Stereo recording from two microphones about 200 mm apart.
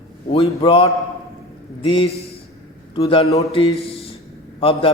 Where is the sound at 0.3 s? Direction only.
30° left (ahead or behind).